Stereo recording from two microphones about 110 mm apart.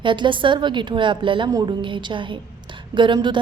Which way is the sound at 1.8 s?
45° right (ahead or behind).